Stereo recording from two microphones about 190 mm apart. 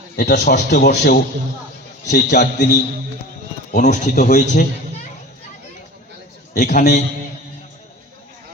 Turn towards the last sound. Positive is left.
turn(degrees=45)  # may be behind; listen again after turning